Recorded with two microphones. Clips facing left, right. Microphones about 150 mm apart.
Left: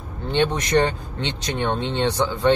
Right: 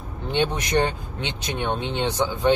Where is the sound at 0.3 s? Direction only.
10° right (ahead or behind).